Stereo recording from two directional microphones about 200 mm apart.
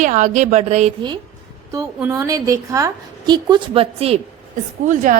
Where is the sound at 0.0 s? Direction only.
40° right (ahead or behind).